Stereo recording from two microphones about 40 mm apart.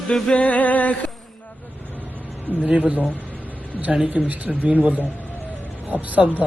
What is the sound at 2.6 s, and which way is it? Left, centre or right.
Speech, right.